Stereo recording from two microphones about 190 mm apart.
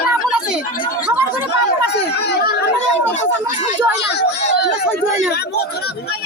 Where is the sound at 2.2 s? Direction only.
60° left (ahead or behind).